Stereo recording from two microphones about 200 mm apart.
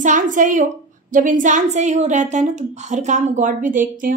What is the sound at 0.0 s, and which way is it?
A woman's voice, 40° right (ahead or behind).